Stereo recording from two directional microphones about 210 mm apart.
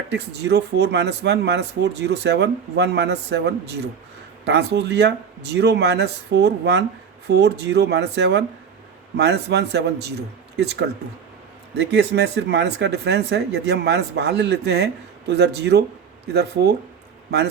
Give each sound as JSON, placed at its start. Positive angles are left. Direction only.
{"t": 0.1, "sound": "speech", "side_deg": -55}